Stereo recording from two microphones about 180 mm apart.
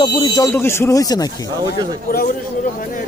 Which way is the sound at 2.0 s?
50° left (ahead or behind).